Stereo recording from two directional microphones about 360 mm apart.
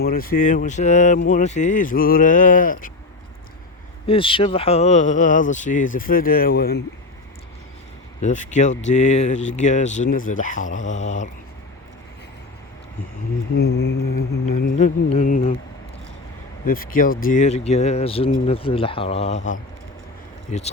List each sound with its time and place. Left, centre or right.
0.0 s speech: left
4.0 s speech: centre
8.2 s speech: left
13.6 s mantra: left
14.6 s a sound: centre
16.6 s speech: left
20.5 s speech: centre